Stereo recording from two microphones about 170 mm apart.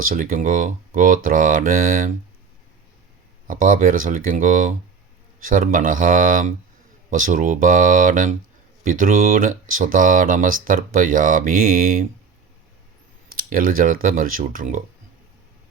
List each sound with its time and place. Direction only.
0.0 s speech: 55° right (ahead or behind)
3.4 s speech: 50° right (ahead or behind)
13.3 s speech: 55° right (ahead or behind)